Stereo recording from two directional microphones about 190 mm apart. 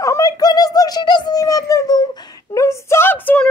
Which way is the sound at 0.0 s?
15° left (ahead or behind).